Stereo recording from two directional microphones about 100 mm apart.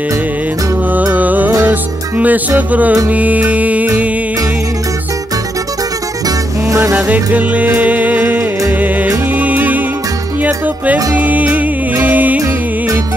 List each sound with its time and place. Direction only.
1.1 s music: 15° right (ahead or behind)
6.2 s music: 30° right (ahead or behind)
7.1 s music: 15° right (ahead or behind)
11.1 s music: 15° right (ahead or behind)